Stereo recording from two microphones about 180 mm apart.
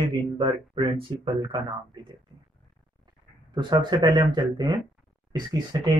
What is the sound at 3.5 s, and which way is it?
Speech, 25° right (ahead or behind).